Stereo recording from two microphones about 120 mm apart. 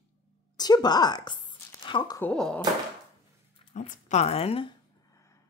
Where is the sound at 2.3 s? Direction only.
5° left (ahead or behind).